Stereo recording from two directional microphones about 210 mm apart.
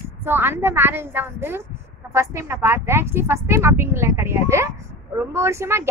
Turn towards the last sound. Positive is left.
turn(degrees=-10)  # may be behind; listen again after turning